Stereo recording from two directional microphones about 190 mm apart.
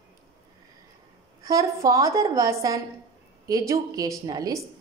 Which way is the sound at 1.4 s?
20° right (ahead or behind).